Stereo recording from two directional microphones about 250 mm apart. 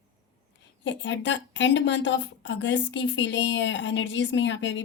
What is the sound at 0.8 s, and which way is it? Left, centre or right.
A woman's voice, left.